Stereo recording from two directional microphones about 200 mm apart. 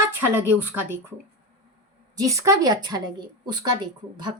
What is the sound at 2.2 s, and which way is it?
A woman's voice, 15° right (ahead or behind).